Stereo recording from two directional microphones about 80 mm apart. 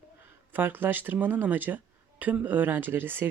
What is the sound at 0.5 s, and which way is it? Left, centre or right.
Speech, right.